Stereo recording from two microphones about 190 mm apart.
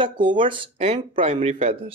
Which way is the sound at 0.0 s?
25° right (ahead or behind).